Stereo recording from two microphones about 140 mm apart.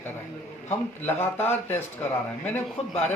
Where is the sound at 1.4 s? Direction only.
15° left (ahead or behind).